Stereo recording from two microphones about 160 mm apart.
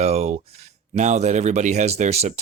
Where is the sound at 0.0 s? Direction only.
40° right (ahead or behind).